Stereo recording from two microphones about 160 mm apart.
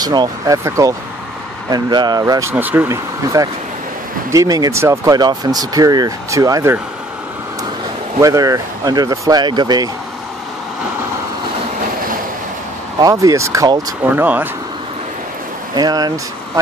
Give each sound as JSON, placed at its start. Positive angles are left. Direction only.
{"t": 0.0, "sound": "speech", "side_deg": -25}
{"t": 2.5, "sound": "speech", "side_deg": -10}
{"t": 8.2, "sound": "speech", "side_deg": -20}
{"t": 13.0, "sound": "speech", "side_deg": -20}
{"t": 14.2, "sound": "speech", "side_deg": -10}
{"t": 15.7, "sound": "speech", "side_deg": -25}